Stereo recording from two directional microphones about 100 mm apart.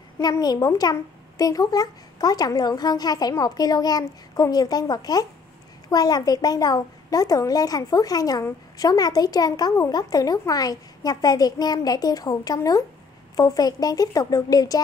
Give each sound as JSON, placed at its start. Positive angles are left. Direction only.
{"t": 0.2, "sound": "speech", "side_deg": 40}